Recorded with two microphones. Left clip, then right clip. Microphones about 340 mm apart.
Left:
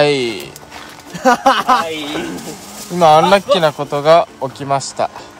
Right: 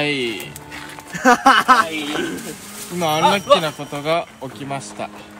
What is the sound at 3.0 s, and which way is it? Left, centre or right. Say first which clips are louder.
Speech: left 8 dB; left.